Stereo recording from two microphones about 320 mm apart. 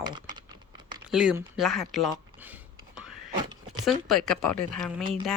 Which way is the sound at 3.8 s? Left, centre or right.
Centre.